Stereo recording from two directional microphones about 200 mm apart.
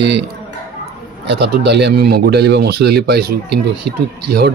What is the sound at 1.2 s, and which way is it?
Speech, 55° right (ahead or behind).